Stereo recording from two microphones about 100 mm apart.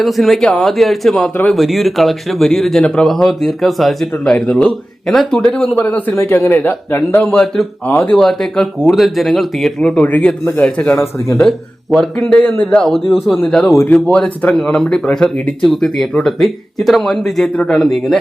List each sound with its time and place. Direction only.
0.0 s speech: centre (ahead or behind)
5.7 s a man's voice: 15° left (ahead or behind)
7.3 s speech: 5° left (ahead or behind)
7.9 s speech: 20° left (ahead or behind)
8.1 s a man's voice: 5° left (ahead or behind)
11.3 s speech: 5° left (ahead or behind)
13.7 s speech: 15° left (ahead or behind)